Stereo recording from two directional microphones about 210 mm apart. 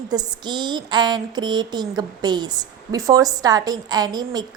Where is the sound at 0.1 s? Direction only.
20° right (ahead or behind).